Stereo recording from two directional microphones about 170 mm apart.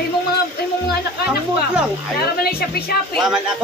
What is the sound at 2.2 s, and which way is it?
Speech, 65° left (ahead or behind).